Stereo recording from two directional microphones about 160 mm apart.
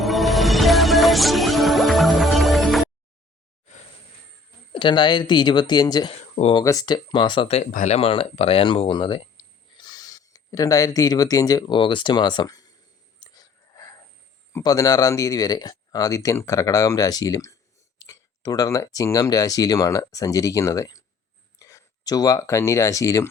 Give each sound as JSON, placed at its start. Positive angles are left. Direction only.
{"t": 0.0, "sound": "music", "side_deg": 0}
{"t": 4.7, "sound": "speech", "side_deg": 30}
{"t": 7.7, "sound": "speech", "side_deg": 55}
{"t": 7.9, "sound": "speech", "side_deg": 35}
{"t": 13.1, "sound": "whispering", "side_deg": 25}
{"t": 14.5, "sound": "speech", "side_deg": 20}